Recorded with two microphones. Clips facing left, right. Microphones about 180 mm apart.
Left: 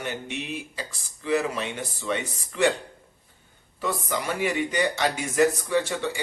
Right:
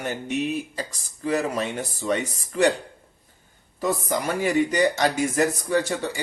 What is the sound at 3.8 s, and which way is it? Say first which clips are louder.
Speech: right 4 dB; 45° right (ahead or behind).